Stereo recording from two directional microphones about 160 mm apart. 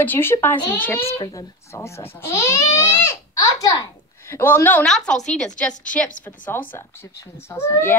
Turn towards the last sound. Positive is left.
turn(degrees=15)  # may be behind; listen again after turning